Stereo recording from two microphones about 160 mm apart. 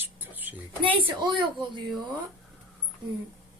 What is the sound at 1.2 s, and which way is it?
Speech, 30° right (ahead or behind).